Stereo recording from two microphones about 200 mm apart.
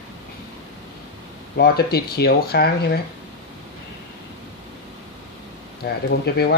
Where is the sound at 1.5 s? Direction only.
50° left (ahead or behind).